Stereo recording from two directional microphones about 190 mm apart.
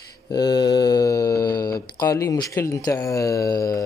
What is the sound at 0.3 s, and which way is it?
Speech, 25° left (ahead or behind).